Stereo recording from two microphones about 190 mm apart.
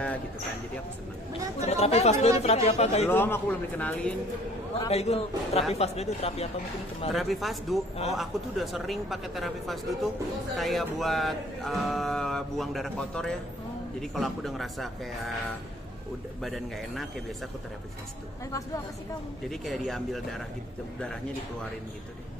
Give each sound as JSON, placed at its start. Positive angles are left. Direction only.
{"t": 1.6, "sound": "speech", "side_deg": 35}
{"t": 3.1, "sound": "a man's voice", "side_deg": 10}
{"t": 4.7, "sound": "speech", "side_deg": 30}
{"t": 7.1, "sound": "speech", "side_deg": 0}
{"t": 16.4, "sound": "speech", "side_deg": 0}
{"t": 19.5, "sound": "speech", "side_deg": 0}